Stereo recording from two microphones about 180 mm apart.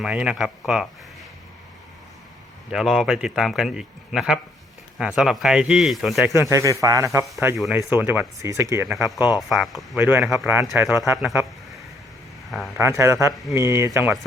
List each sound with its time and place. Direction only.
0.0 s speech: 5° right (ahead or behind)
2.7 s speech: centre (ahead or behind)
6.2 s speech: 15° right (ahead or behind)
7.5 s speech: centre (ahead or behind)
7.8 s speech: 10° right (ahead or behind)
12.5 s speech: centre (ahead or behind)
12.8 s speech: 15° right (ahead or behind)